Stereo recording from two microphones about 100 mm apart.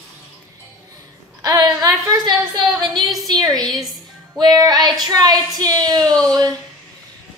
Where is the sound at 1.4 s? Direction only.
40° right (ahead or behind).